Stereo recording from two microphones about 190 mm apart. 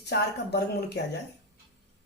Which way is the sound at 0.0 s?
60° left (ahead or behind).